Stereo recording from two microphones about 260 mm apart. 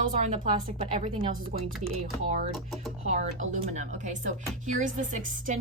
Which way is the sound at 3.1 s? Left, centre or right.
Right.